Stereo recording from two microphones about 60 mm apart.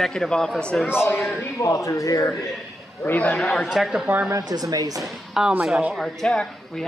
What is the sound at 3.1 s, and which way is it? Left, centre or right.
Speech, left.